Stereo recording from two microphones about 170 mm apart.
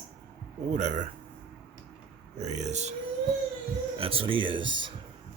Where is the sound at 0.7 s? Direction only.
45° right (ahead or behind).